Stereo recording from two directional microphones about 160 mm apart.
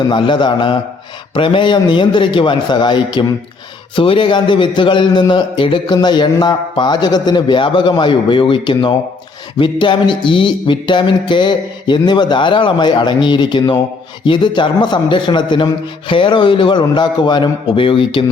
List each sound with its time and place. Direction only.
0.1 s a man's voice: 30° left (ahead or behind)